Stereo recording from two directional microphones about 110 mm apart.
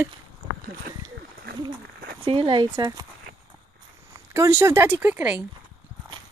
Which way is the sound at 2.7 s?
35° right (ahead or behind).